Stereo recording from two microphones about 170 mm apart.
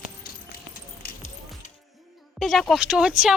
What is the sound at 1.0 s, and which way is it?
Music, 60° left (ahead or behind).